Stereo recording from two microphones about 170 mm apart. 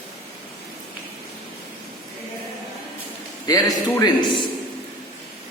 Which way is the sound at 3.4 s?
20° left (ahead or behind).